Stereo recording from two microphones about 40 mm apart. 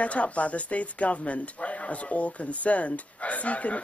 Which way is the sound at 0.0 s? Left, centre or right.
Left.